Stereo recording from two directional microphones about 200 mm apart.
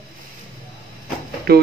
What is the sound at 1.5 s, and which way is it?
Speech, 50° right (ahead or behind).